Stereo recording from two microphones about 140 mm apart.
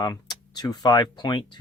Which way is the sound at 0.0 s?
30° left (ahead or behind).